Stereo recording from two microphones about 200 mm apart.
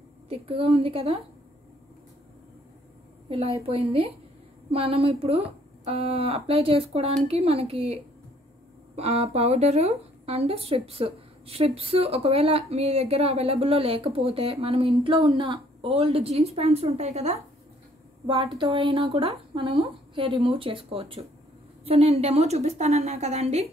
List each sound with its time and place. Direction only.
0.3 s speech: 30° right (ahead or behind)
3.3 s speech: 30° right (ahead or behind)
8.9 s a woman's voice: 30° right (ahead or behind)